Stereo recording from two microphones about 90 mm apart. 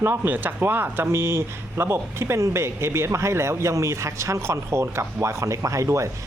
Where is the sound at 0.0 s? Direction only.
25° right (ahead or behind).